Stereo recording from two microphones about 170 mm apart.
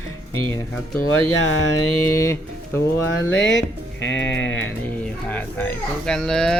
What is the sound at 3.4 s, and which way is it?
Speech, 90° left.